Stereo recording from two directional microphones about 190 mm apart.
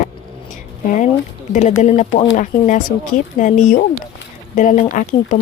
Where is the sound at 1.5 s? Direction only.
40° left (ahead or behind).